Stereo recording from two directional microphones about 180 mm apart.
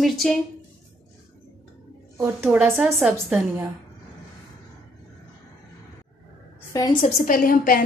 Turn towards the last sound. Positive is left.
turn(degrees=50)  # may be behind; listen again after turning